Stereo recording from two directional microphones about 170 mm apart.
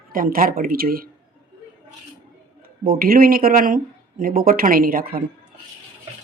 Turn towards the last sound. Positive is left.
turn(degrees=-60)  # may be behind; listen again after turning